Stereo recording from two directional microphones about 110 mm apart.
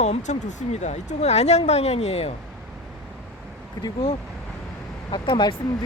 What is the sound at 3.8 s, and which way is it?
Speech, 40° left (ahead or behind).